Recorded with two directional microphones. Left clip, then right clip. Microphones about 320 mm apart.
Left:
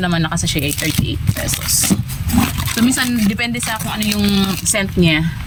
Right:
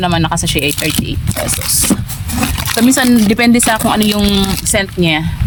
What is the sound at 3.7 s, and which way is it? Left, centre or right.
Speech, centre.